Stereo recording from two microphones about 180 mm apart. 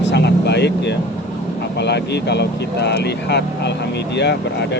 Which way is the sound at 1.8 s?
70° left (ahead or behind).